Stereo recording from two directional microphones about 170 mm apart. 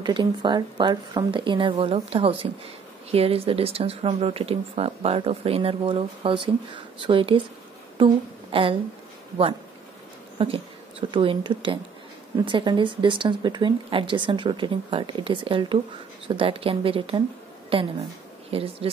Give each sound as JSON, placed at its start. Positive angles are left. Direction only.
{"t": 0.0, "sound": "a woman's voice", "side_deg": -25}
{"t": 10.4, "sound": "speech", "side_deg": -35}